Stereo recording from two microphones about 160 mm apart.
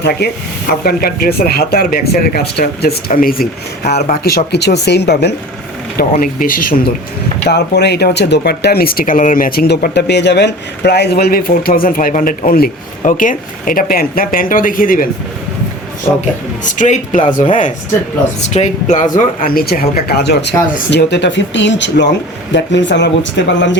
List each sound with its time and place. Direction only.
0.2 s speech: 90° left
0.7 s speech: 75° left (ahead or behind)
3.1 s speech: 60° left (ahead or behind); by 5.3 s 90° left
6.0 s speech: 60° left (ahead or behind)
7.4 s speech: 90° left; by 15.0 s 60° left (ahead or behind)
16.6 s speech: 50° left (ahead or behind); by 23.7 s 90° left